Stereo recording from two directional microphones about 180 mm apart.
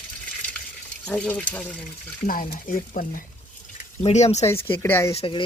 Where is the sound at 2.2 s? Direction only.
50° left (ahead or behind).